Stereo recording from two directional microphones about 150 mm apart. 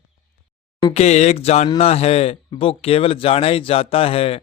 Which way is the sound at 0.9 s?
50° left (ahead or behind).